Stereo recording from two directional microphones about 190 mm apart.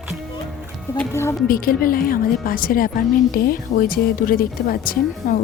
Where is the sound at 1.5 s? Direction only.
50° left (ahead or behind).